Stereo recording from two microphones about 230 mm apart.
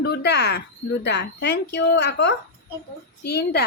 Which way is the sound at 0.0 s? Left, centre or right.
Left.